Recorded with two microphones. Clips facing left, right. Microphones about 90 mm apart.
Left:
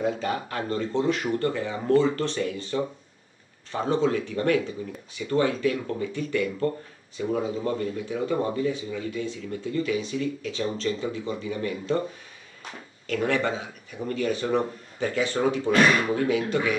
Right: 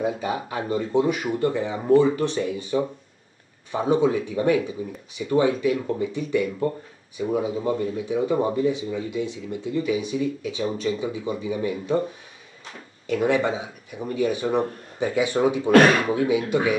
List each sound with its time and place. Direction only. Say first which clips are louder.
0.0 s speech: right 1 dB; 15° right (ahead or behind)
13.0 s speech: right 4 dB; 15° right (ahead or behind)
15.7 s speech: right 6 dB; 55° right (ahead or behind)
16.1 s speech: right 3 dB; 15° right (ahead or behind)